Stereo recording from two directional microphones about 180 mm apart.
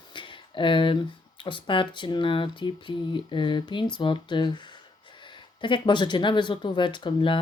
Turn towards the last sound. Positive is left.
turn(degrees=25)  # may be behind; listen again after turning